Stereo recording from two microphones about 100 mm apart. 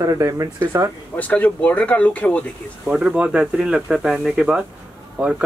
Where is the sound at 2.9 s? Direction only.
10° right (ahead or behind).